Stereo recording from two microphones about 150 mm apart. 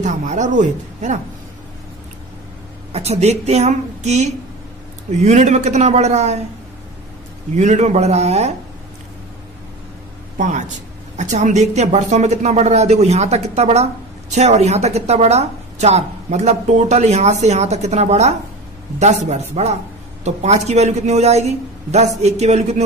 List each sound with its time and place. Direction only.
0.0 s a woman's voice: 55° right (ahead or behind)
2.9 s a woman's voice: 45° right (ahead or behind)
7.5 s a woman's voice: 50° right (ahead or behind)
10.3 s a woman's voice: 55° right (ahead or behind)